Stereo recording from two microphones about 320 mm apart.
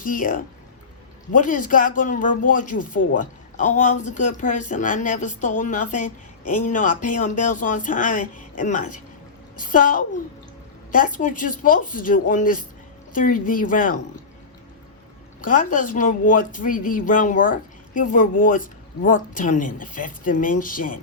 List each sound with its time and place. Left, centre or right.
0.0 s speech: left
15.4 s speech: left